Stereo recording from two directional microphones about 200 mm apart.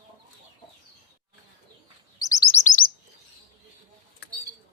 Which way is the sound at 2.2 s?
15° left (ahead or behind).